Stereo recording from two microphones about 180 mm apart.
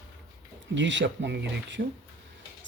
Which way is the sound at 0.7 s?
85° right.